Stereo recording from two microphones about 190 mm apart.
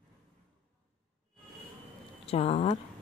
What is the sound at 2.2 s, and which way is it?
Speech, 30° left (ahead or behind).